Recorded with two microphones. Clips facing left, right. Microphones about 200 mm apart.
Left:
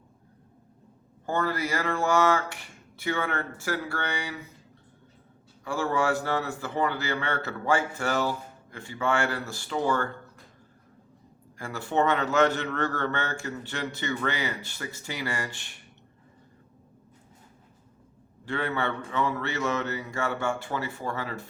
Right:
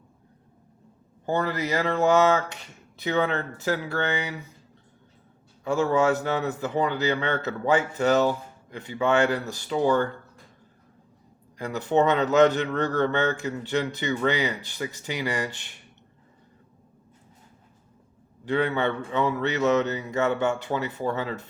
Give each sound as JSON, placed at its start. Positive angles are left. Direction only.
{"t": 1.2, "sound": "speech", "side_deg": -20}
{"t": 5.6, "sound": "speech", "side_deg": -20}
{"t": 11.5, "sound": "speech", "side_deg": -20}
{"t": 18.4, "sound": "speech", "side_deg": -20}